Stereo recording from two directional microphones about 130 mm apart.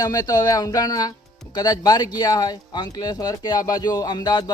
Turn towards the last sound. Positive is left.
turn(degrees=35)  # may be behind; listen again after turning